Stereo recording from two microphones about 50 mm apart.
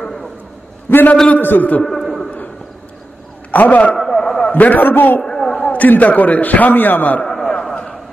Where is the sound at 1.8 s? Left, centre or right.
Centre.